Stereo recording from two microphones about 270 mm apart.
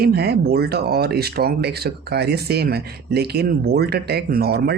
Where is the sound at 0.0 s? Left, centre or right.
Right.